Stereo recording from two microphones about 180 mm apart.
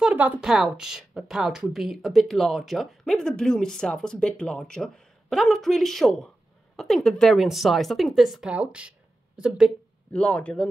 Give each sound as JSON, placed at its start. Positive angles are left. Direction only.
{"t": 0.0, "sound": "a woman's voice", "side_deg": -10}
{"t": 10.1, "sound": "a woman's voice", "side_deg": 5}